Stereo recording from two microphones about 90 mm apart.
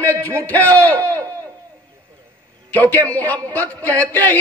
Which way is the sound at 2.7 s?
20° left (ahead or behind).